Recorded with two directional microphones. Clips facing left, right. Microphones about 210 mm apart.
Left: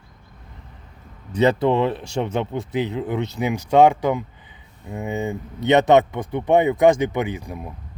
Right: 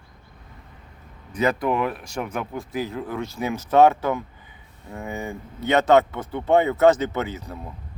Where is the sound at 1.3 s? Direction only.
25° left (ahead or behind).